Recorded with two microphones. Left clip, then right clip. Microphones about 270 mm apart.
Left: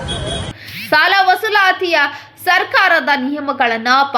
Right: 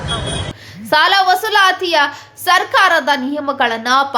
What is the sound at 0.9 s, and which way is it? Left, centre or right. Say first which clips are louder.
A woman's voice: even; centre.